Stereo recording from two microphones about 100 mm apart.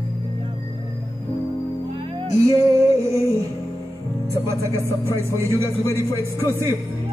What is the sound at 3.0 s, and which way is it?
Music, 30° right (ahead or behind).